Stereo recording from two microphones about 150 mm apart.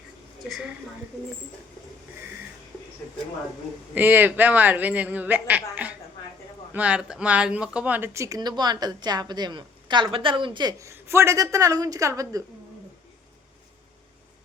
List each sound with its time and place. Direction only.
3.9 s a man's voice: 15° right (ahead or behind)